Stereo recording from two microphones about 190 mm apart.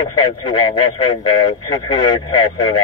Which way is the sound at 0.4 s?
20° left (ahead or behind).